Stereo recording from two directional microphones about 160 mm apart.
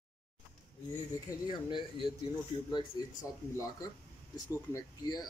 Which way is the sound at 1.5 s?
30° left (ahead or behind).